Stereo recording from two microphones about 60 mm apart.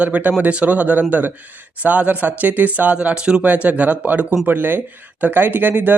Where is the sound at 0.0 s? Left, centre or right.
Right.